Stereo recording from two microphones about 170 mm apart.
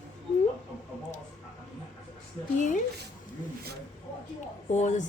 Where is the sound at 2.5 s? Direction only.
50° left (ahead or behind).